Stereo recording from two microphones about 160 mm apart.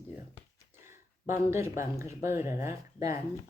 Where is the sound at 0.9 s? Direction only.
15° right (ahead or behind).